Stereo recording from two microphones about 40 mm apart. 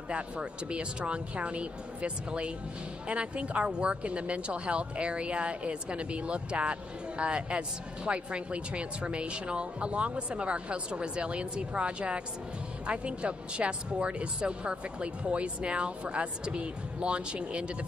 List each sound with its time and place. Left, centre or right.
0.1 s speech: right